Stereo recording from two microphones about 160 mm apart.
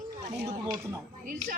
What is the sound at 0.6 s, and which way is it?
Speech, 25° right (ahead or behind).